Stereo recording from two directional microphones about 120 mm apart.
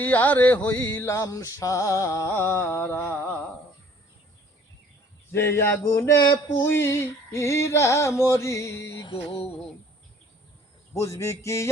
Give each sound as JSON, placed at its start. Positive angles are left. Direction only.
{"t": 0.0, "sound": "music", "side_deg": 15}
{"t": 5.3, "sound": "music", "side_deg": 20}
{"t": 10.9, "sound": "music", "side_deg": 25}